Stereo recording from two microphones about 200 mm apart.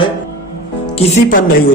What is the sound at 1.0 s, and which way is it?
Speech, 30° left (ahead or behind).